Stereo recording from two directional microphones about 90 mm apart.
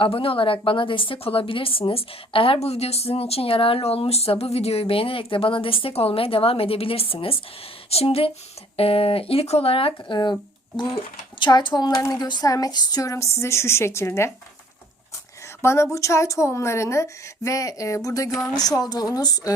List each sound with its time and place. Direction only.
0.0 s a woman's voice: 90° left
10.9 s speech: 60° left (ahead or behind)
11.9 s a woman's voice: 40° left (ahead or behind)
15.6 s a woman's voice: 30° left (ahead or behind)